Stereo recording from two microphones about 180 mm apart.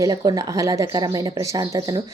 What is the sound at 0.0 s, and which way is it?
Speech, 20° right (ahead or behind).